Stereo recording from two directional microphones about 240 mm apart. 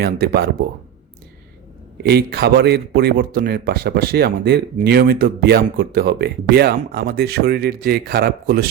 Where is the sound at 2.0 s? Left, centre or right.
Right.